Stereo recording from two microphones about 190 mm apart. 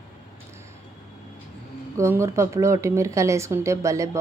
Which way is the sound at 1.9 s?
15° right (ahead or behind).